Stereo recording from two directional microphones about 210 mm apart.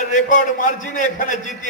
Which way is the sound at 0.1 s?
35° left (ahead or behind).